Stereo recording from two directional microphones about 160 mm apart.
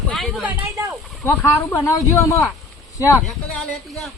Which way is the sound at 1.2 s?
10° left (ahead or behind).